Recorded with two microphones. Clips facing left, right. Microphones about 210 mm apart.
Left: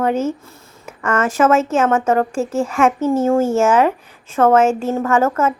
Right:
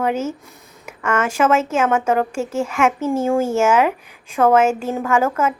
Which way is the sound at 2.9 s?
30° left (ahead or behind).